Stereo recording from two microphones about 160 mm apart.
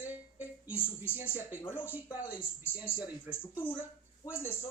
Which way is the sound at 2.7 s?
10° right (ahead or behind).